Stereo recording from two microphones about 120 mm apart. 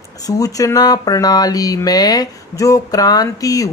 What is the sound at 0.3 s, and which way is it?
Speech, 30° left (ahead or behind).